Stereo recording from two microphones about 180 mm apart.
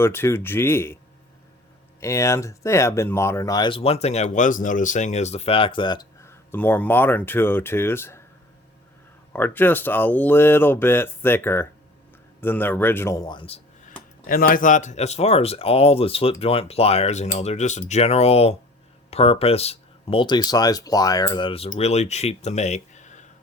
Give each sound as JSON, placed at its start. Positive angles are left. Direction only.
{"t": 0.0, "sound": "speech", "side_deg": 15}
{"t": 2.0, "sound": "speech", "side_deg": 15}
{"t": 9.3, "sound": "speech", "side_deg": 10}
{"t": 14.3, "sound": "speech", "side_deg": 50}